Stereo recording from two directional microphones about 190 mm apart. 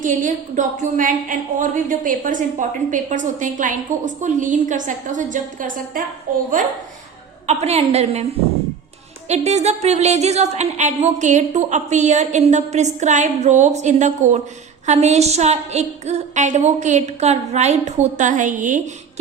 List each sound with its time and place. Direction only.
0.0 s a woman's voice: 45° right (ahead or behind)
7.4 s a woman's voice: 35° right (ahead or behind)
9.3 s a woman's voice: 35° right (ahead or behind)